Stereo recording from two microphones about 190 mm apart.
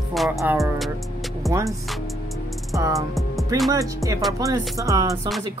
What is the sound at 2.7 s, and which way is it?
Music, 15° right (ahead or behind).